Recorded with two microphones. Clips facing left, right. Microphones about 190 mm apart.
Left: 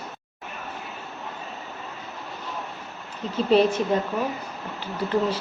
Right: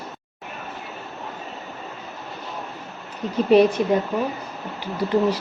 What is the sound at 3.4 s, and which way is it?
Speech, 15° right (ahead or behind).